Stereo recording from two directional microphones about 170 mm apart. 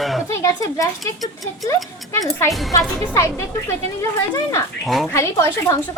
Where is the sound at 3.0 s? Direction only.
15° left (ahead or behind).